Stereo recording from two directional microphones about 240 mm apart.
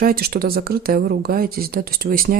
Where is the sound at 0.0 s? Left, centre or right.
Right.